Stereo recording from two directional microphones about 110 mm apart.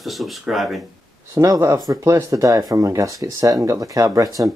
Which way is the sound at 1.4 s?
25° right (ahead or behind).